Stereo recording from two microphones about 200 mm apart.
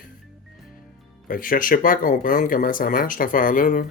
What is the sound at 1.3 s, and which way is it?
Speech, 45° left (ahead or behind).